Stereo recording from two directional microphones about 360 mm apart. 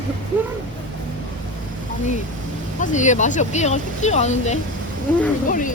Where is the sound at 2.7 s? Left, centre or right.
Left.